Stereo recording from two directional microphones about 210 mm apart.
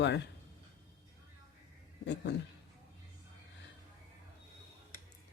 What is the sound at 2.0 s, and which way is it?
Speech, 55° left (ahead or behind).